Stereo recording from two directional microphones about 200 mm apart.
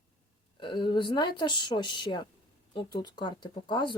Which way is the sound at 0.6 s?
25° left (ahead or behind).